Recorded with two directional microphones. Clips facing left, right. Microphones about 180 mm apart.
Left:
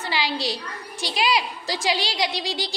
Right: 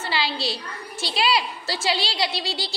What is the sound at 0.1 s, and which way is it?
A woman's voice, 15° left (ahead or behind).